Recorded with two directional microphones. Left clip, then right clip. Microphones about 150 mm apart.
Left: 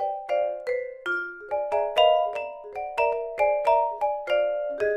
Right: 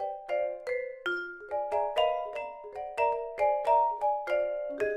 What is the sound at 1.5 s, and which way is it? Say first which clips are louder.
Music: left 5 dB; 30° left (ahead or behind).